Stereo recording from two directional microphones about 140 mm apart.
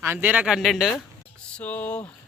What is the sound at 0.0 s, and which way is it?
Speech, 15° right (ahead or behind).